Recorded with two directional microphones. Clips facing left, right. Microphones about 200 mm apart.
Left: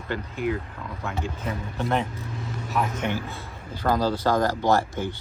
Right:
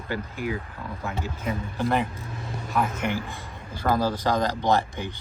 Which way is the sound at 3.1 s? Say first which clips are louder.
Even; 15° right (ahead or behind).